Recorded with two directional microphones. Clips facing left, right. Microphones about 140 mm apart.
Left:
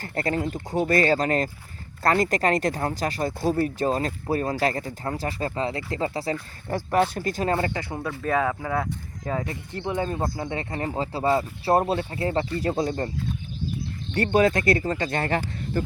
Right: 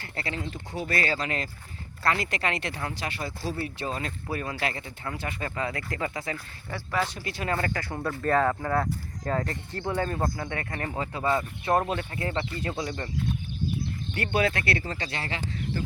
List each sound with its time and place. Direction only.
0.0 s speech: 45° left (ahead or behind)
6.7 s speech: 50° left (ahead or behind)
7.5 s speech: 25° left (ahead or behind)
8.0 s speech: 5° left (ahead or behind); by 13.1 s 35° left (ahead or behind)
14.1 s speech: 40° left (ahead or behind)